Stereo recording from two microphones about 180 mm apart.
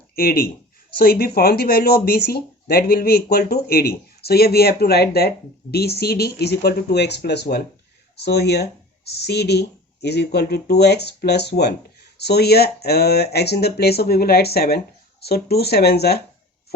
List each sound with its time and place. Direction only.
0.2 s speech: 55° left (ahead or behind)